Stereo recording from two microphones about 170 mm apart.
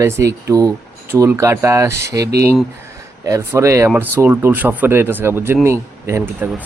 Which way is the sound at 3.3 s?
15° right (ahead or behind).